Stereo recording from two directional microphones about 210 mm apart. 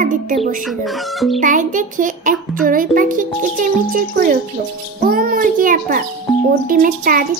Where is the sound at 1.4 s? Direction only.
40° right (ahead or behind).